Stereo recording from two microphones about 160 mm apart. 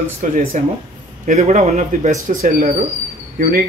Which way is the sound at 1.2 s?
40° right (ahead or behind).